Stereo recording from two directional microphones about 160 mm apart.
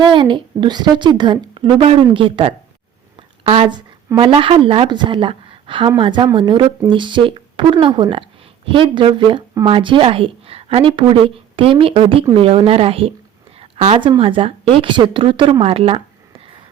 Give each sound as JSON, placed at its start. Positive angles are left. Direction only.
{"t": 0.0, "sound": "a woman's voice", "side_deg": -30}
{"t": 13.6, "sound": "a sound", "side_deg": -40}
{"t": 14.2, "sound": "speech", "side_deg": -35}